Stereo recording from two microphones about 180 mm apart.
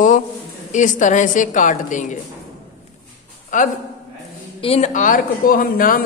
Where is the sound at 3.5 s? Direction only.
45° left (ahead or behind).